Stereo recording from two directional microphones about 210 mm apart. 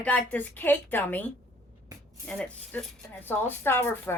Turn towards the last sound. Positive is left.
turn(degrees=10)  # may be behind; listen again after turning